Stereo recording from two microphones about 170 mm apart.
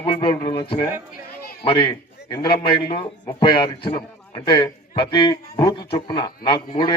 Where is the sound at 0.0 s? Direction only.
30° left (ahead or behind).